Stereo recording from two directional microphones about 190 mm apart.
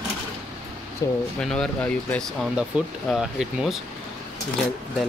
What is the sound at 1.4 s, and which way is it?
Speech, 5° left (ahead or behind).